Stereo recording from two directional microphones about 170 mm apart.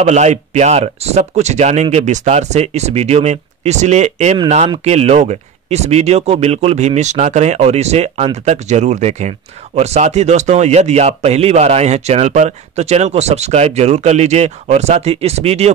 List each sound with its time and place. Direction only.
0.0 s speech: 40° right (ahead or behind)